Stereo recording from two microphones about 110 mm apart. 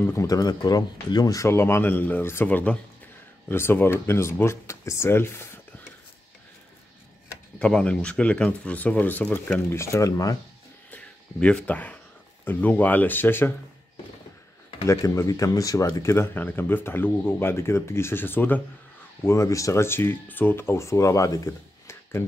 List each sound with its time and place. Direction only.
0.0 s speech: 25° left (ahead or behind)
7.5 s speech: 10° left (ahead or behind); by 10.3 s 30° left (ahead or behind)
10.9 s a sound: 10° left (ahead or behind)
12.4 s speech: 15° left (ahead or behind)
14.9 s speech: 30° left (ahead or behind)